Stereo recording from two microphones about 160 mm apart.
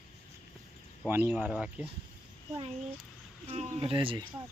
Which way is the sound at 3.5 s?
45° right (ahead or behind).